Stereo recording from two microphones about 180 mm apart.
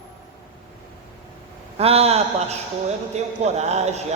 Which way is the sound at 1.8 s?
35° right (ahead or behind).